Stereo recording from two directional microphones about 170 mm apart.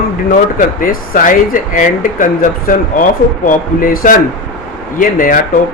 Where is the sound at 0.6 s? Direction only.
55° left (ahead or behind).